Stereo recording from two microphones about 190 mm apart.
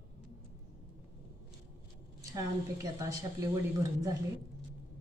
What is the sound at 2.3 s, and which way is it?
A woman's voice, 15° right (ahead or behind).